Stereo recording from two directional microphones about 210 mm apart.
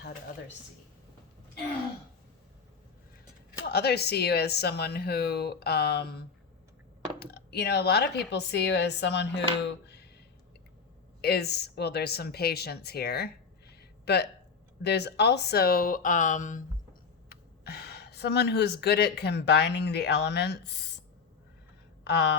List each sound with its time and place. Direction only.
3.7 s speech: 50° left (ahead or behind)
11.2 s speech: 50° left (ahead or behind)
17.2 s speech: 50° left (ahead or behind)
22.0 s a sound: 55° left (ahead or behind)